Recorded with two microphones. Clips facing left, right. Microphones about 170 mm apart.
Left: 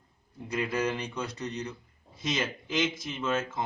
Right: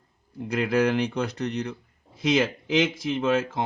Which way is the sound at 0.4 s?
70° right (ahead or behind).